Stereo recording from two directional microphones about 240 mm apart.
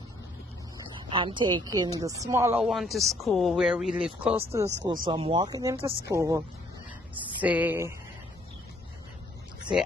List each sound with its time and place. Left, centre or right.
1.1 s a woman's voice: centre